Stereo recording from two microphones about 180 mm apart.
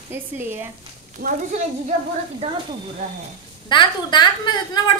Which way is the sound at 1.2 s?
45° right (ahead or behind).